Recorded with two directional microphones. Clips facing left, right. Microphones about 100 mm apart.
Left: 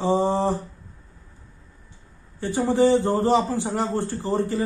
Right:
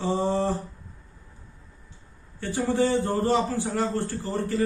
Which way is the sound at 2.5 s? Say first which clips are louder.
Left 5 dB; 20° left (ahead or behind).